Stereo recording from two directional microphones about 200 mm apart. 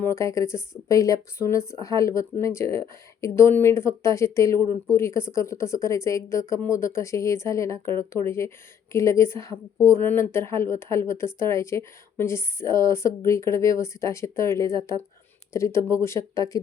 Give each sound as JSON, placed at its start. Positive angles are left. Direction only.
{"t": 0.0, "sound": "a woman's voice", "side_deg": 15}